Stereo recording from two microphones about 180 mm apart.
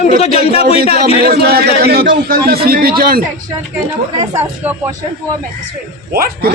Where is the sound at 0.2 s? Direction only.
35° left (ahead or behind).